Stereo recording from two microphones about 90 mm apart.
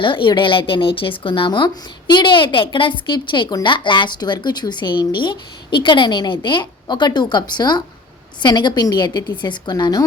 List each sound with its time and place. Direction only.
0.0 s a woman's voice: 65° left (ahead or behind); by 10.1 s 45° left (ahead or behind)